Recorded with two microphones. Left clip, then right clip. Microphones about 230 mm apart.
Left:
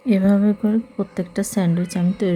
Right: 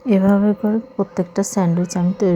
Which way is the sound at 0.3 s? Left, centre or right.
Centre.